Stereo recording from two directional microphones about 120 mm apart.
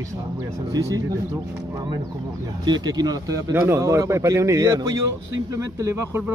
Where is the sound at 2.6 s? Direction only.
35° right (ahead or behind).